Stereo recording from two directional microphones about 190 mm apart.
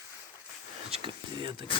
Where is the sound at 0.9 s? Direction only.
25° right (ahead or behind).